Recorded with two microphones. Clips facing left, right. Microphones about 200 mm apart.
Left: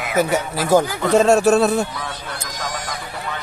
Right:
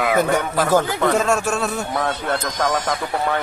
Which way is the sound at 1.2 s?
35° left (ahead or behind).